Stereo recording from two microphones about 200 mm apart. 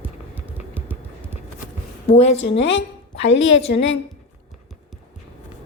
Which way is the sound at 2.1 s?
30° left (ahead or behind).